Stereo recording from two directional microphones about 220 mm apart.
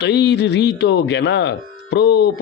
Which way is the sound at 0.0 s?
50° left (ahead or behind).